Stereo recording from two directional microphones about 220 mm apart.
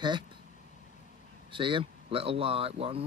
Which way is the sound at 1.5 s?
20° right (ahead or behind).